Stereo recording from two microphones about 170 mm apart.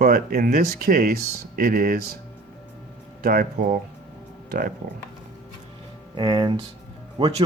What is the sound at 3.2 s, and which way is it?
Speech, 60° right (ahead or behind).